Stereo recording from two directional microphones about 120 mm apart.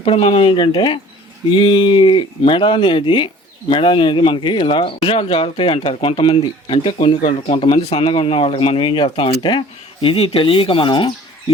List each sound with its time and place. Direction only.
0.0 s speech: 50° left (ahead or behind)